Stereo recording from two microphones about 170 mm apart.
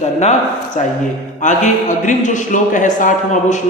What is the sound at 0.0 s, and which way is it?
Speech, 40° left (ahead or behind).